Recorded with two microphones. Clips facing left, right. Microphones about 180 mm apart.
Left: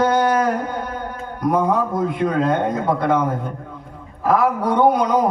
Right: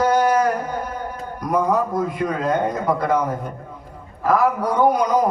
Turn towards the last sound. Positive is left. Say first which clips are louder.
# left 1 dB
turn(degrees=25)  # may be behind; listen again after turning